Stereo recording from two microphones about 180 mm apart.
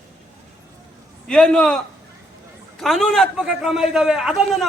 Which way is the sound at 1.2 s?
5° left (ahead or behind).